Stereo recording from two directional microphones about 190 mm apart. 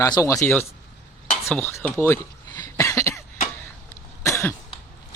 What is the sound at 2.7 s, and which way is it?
Cough, 15° left (ahead or behind).